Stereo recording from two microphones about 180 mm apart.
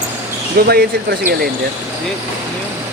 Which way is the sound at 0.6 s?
55° right (ahead or behind).